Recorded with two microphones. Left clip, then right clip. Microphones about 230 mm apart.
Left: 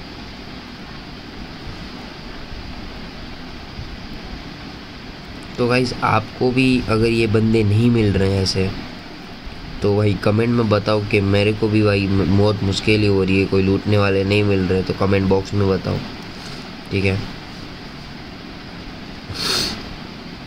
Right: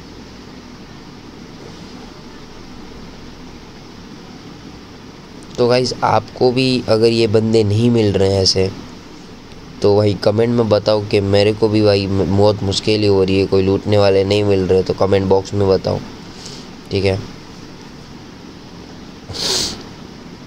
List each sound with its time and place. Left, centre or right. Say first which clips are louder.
5.6 s speech: right 4 dB; centre
9.8 s speech: right 5 dB; centre
16.9 s speech: right 4 dB; centre
19.3 s a sound: right 2 dB; centre